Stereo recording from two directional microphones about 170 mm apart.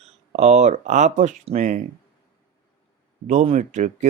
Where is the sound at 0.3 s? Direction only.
45° right (ahead or behind).